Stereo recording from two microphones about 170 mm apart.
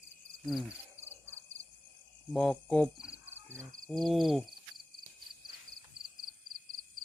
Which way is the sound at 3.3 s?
15° right (ahead or behind).